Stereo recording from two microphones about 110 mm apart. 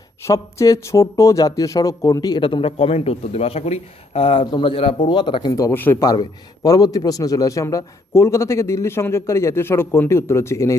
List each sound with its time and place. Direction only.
0.3 s speech: 30° left (ahead or behind)
2.4 s a man's voice: 55° left (ahead or behind)
4.9 s speech: 45° left (ahead or behind)
5.7 s a man's voice: 20° left (ahead or behind)
6.0 s a man's voice: 35° left (ahead or behind)